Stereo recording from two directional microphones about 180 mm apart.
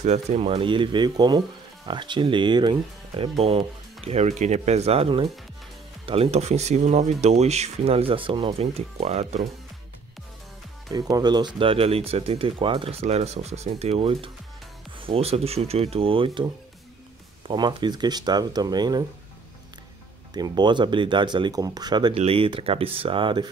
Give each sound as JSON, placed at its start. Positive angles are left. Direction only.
{"t": 0.0, "sound": "speech", "side_deg": -40}
{"t": 10.9, "sound": "speech", "side_deg": -20}
{"t": 17.5, "sound": "speech", "side_deg": -25}
{"t": 20.3, "sound": "speech", "side_deg": -25}
{"t": 22.1, "sound": "speech", "side_deg": -35}